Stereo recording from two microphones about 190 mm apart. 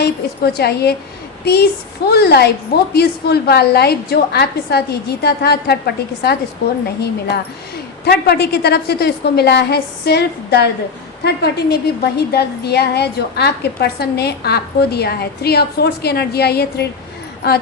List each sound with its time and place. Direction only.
0.0 s a woman's voice: 60° left (ahead or behind)
2.0 s a woman's voice: 60° left (ahead or behind)